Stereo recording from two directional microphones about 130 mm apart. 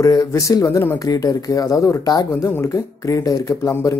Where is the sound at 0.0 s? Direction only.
35° left (ahead or behind).